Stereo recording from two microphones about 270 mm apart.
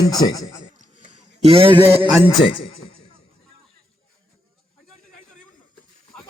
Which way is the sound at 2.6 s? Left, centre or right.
Centre.